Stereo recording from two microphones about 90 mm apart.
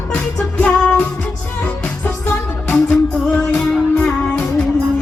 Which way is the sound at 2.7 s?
10° left (ahead or behind).